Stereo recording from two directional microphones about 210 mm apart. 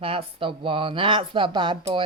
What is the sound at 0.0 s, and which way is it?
Speech, 25° right (ahead or behind).